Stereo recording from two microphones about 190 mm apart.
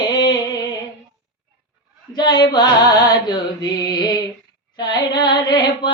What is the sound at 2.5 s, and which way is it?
Music, 20° left (ahead or behind).